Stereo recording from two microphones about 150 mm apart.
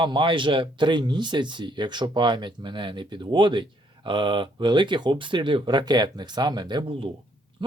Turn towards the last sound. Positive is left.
turn(degrees=-35)  # may be behind; listen again after turning